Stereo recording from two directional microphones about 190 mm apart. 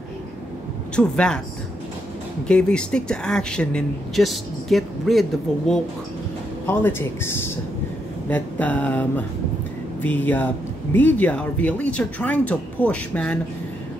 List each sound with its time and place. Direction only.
0.9 s speech: 5° left (ahead or behind)
2.4 s speech: 5° left (ahead or behind)
6.6 s speech: 10° left (ahead or behind)